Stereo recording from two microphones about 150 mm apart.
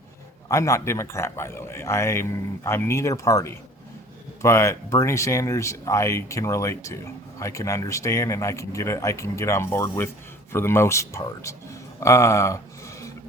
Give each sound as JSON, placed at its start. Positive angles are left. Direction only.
{"t": 0.4, "sound": "a man's voice", "side_deg": 20}